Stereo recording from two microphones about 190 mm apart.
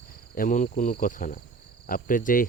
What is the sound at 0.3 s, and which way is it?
Speech, 45° left (ahead or behind).